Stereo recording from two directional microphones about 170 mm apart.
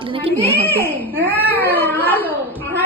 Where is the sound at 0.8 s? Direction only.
10° left (ahead or behind).